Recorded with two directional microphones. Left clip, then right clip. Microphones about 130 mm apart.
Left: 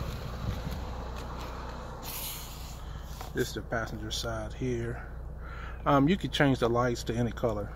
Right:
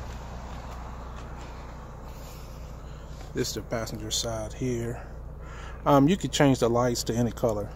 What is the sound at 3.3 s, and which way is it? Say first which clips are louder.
Speech: right 2 dB; 20° right (ahead or behind).